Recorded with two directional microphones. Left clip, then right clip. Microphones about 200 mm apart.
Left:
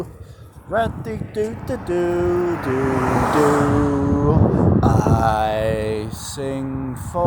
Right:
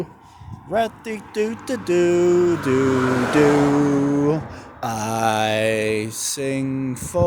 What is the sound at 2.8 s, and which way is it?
Speech, 25° right (ahead or behind).